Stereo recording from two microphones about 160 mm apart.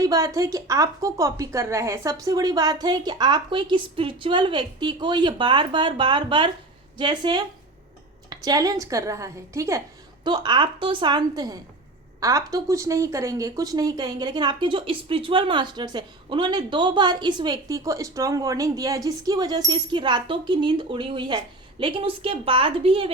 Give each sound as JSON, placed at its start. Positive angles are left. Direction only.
{"t": 0.0, "sound": "speech", "side_deg": -20}